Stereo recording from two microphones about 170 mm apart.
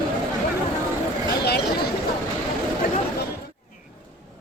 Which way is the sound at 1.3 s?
70° left (ahead or behind).